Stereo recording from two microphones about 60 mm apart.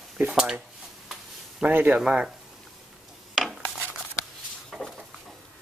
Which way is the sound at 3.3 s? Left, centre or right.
Centre.